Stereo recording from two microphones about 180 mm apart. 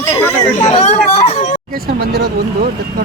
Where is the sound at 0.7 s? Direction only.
35° left (ahead or behind).